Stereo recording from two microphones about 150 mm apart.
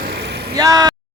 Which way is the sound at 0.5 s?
25° right (ahead or behind).